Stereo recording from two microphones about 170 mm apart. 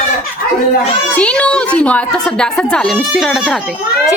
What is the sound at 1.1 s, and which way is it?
A woman's voice, 5° left (ahead or behind).